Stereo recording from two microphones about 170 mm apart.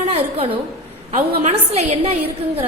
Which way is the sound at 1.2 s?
45° right (ahead or behind).